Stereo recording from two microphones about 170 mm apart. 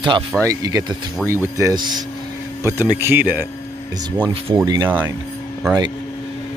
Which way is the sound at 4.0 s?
30° right (ahead or behind).